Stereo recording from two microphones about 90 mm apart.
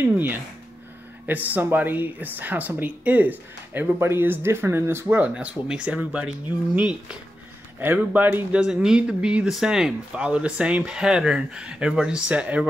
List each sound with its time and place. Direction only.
1.2 s speech: 20° right (ahead or behind)